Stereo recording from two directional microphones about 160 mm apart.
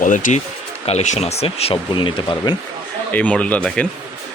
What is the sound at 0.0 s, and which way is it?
Speech, 55° left (ahead or behind).